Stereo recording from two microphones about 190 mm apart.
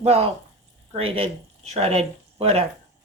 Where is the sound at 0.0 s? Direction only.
35° right (ahead or behind).